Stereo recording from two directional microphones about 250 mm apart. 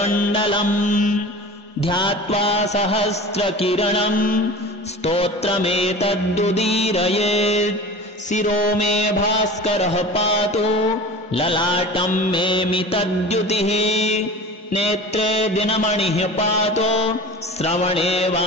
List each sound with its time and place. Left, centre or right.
0.0 s mantra: left
0.3 s music: left
1.8 s music: centre